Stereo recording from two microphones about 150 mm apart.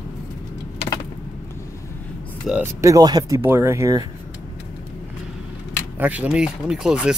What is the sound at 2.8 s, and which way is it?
Speech, 25° right (ahead or behind).